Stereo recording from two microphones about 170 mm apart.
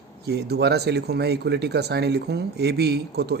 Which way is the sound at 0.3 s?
70° right (ahead or behind).